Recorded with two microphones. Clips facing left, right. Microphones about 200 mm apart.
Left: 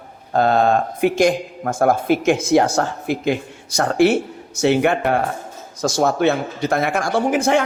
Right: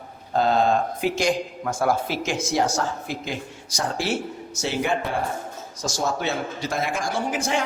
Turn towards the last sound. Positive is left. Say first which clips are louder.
# left 8 dB
turn(degrees=60)  # may be behind; listen again after turning